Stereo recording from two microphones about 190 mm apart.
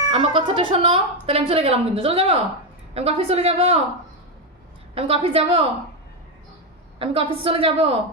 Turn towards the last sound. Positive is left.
turn(degrees=-30)  # may be behind; listen again after turning